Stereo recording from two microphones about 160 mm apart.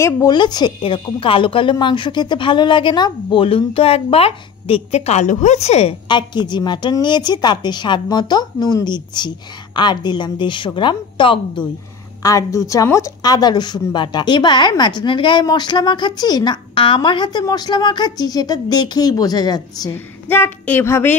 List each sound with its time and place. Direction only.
0.0 s a woman's voice: 25° left (ahead or behind); by 5.9 s 40° left (ahead or behind)
6.0 s speech: 30° left (ahead or behind)
12.2 s speech: 20° left (ahead or behind)
20.2 s a woman's voice: 15° left (ahead or behind)